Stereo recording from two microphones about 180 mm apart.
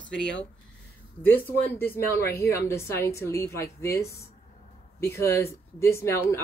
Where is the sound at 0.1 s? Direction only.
75° left (ahead or behind).